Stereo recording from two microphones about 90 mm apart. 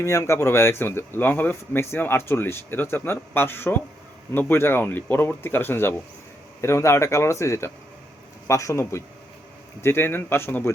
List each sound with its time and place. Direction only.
0.0 s speech: 30° left (ahead or behind)